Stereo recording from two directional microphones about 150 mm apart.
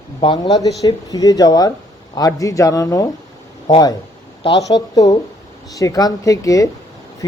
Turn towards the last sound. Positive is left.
turn(degrees=25)  # may be behind; listen again after turning